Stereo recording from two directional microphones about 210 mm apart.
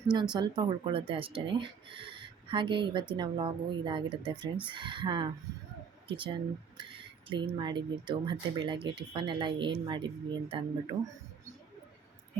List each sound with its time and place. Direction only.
0.1 s speech: 20° right (ahead or behind)